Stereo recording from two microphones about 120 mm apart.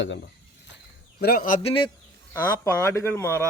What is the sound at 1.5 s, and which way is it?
Speech, 80° left.